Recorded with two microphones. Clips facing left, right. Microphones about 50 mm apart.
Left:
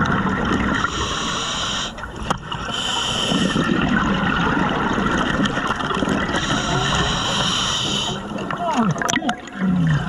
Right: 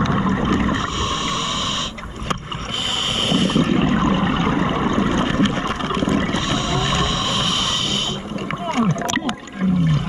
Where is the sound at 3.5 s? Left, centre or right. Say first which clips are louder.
Right 1 dB; left.